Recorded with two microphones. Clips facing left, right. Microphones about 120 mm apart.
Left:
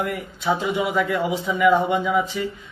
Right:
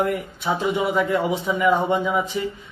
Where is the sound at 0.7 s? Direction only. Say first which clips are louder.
Right 1 dB; 20° right (ahead or behind).